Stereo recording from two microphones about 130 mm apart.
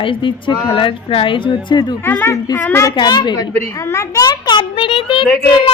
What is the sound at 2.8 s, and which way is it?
Speech, 30° left (ahead or behind).